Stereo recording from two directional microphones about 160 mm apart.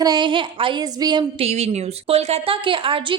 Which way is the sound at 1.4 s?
45° right (ahead or behind).